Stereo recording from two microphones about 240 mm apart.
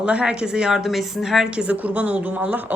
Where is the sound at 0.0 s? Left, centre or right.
Centre.